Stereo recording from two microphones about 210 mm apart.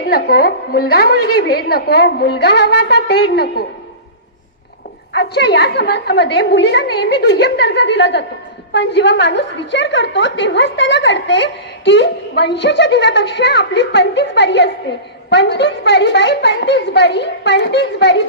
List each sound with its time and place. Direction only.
0.1 s a woman's voice: 50° left (ahead or behind)
5.1 s a woman's voice: 50° left (ahead or behind)